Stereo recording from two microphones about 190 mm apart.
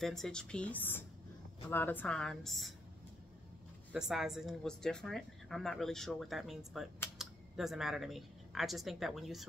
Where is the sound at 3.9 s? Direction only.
Centre (ahead or behind).